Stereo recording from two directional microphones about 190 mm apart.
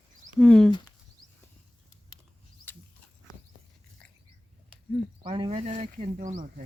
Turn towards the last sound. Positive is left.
turn(degrees=-45)  # may be behind; listen again after turning